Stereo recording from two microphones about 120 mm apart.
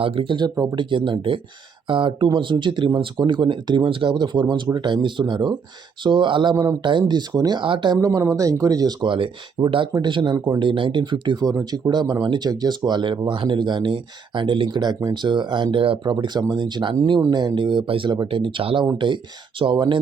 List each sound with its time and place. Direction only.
0.0 s speech: 50° right (ahead or behind)
8.0 s speech: 25° right (ahead or behind); by 16.1 s 50° right (ahead or behind)
16.1 s speech: 35° right (ahead or behind)